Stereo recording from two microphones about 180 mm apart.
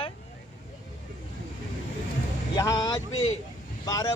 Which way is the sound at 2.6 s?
20° left (ahead or behind).